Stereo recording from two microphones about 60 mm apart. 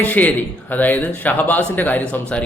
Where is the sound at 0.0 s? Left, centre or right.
Left.